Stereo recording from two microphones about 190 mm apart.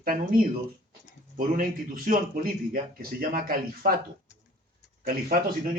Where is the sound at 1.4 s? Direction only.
45° right (ahead or behind).